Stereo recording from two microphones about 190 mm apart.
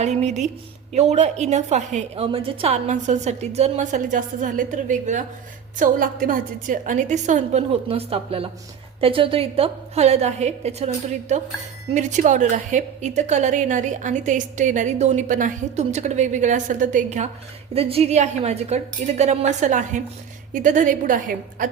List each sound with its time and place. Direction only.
0.0 s a woman's voice: 35° right (ahead or behind)